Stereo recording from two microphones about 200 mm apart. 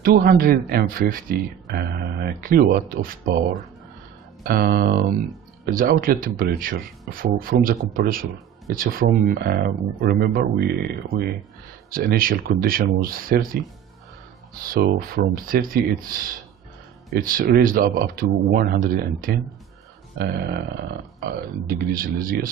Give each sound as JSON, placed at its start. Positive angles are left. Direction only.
{"t": 0.0, "sound": "speech", "side_deg": -50}
{"t": 4.5, "sound": "speech", "side_deg": -50}
{"t": 14.6, "sound": "speech", "side_deg": -45}